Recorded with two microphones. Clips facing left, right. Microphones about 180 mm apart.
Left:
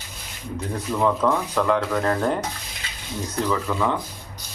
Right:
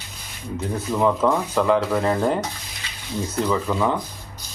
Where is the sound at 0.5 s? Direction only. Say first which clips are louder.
Right 2 dB; 5° right (ahead or behind).